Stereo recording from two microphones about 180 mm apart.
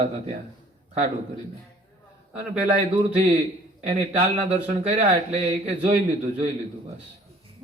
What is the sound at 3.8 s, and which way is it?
A man's voice, 35° right (ahead or behind).